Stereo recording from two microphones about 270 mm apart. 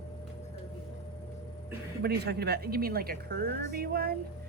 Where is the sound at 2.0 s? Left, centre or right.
Right.